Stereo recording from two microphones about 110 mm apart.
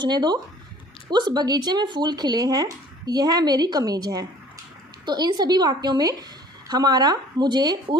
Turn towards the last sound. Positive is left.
turn(degrees=-40)  # may be behind; listen again after turning